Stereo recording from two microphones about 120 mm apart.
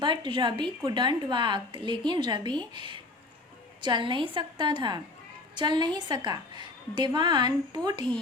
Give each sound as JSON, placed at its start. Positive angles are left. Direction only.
{"t": 0.0, "sound": "a woman's voice", "side_deg": -40}